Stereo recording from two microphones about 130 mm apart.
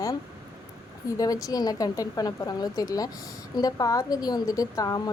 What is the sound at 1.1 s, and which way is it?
Speech, 30° left (ahead or behind).